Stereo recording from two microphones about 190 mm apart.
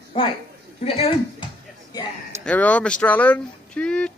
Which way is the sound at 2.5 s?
5° left (ahead or behind).